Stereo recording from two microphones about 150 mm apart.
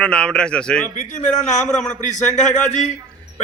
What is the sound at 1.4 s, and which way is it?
Speech, 55° left (ahead or behind).